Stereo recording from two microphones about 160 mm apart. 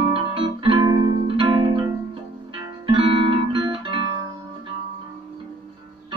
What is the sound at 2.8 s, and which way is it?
Guitar, 35° right (ahead or behind).